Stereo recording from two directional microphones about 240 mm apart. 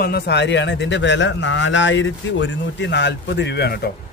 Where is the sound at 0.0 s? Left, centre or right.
Left.